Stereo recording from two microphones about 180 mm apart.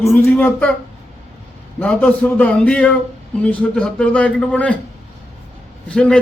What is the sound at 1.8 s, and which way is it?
A man's voice, 10° left (ahead or behind).